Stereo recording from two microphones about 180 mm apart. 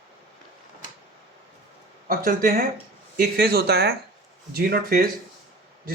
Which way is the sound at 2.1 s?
50° right (ahead or behind).